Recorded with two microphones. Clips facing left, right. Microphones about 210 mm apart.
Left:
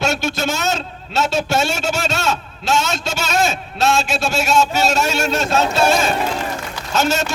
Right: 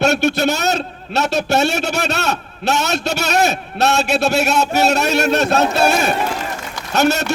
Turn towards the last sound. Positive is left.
turn(degrees=-65)  # may be behind; listen again after turning